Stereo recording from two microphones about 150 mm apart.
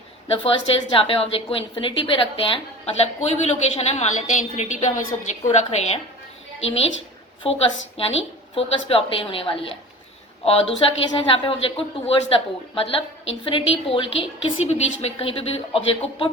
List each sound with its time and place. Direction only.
0.4 s a woman's voice: 40° left (ahead or behind)
7.4 s a woman's voice: 40° left (ahead or behind)